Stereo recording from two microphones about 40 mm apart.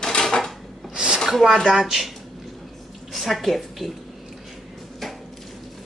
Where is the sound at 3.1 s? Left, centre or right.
Centre.